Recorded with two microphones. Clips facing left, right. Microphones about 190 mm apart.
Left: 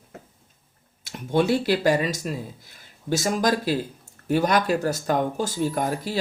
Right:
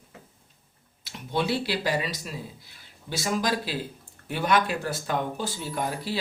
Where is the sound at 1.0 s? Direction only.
45° left (ahead or behind).